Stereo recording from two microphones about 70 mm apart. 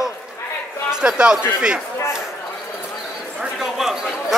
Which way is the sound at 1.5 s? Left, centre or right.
Centre.